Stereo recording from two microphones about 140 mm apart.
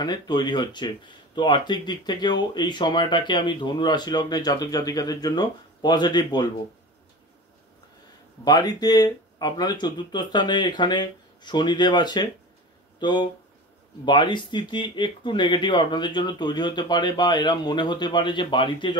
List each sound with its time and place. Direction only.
0.0 s speech: 30° left (ahead or behind)
8.5 s speech: 30° left (ahead or behind)